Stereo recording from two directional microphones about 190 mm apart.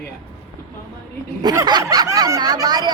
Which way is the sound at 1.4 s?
20° right (ahead or behind).